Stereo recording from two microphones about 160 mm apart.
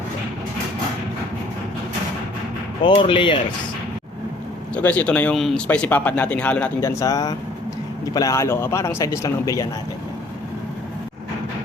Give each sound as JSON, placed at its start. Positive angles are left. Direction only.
{"t": 3.0, "sound": "speech", "side_deg": 30}
{"t": 4.7, "sound": "speech", "side_deg": 10}
{"t": 7.0, "sound": "speech", "side_deg": 20}